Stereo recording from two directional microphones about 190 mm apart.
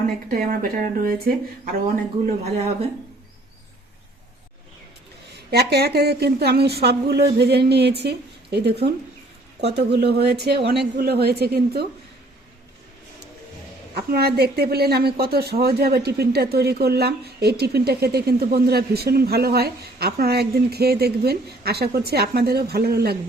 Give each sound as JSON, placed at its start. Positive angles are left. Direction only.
{"t": 0.3, "sound": "speech", "side_deg": -50}
{"t": 5.3, "sound": "a woman's voice", "side_deg": -55}
{"t": 13.9, "sound": "a woman's voice", "side_deg": -55}